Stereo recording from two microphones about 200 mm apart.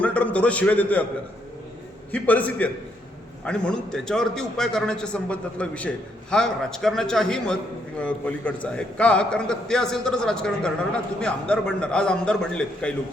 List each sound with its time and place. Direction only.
0.0 s a man's voice: 5° left (ahead or behind)
2.1 s a man's voice: 10° left (ahead or behind)